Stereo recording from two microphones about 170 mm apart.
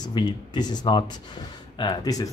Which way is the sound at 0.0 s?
25° left (ahead or behind).